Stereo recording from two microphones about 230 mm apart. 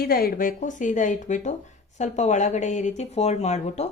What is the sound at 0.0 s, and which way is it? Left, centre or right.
A woman's voice, left.